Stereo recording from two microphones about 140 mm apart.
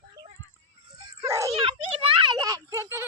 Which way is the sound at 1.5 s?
45° right (ahead or behind).